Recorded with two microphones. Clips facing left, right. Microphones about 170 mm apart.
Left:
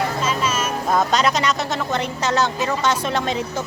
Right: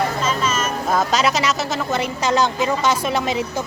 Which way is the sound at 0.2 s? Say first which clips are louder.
Right 1 dB; 10° left (ahead or behind).